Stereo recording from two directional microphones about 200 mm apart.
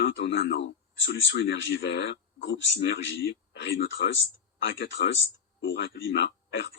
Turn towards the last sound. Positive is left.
turn(degrees=60)  # may be behind; listen again after turning